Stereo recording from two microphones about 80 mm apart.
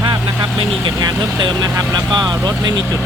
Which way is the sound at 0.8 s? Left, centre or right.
Right.